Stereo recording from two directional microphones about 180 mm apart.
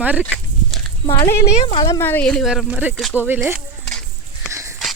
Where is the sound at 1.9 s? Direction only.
10° left (ahead or behind).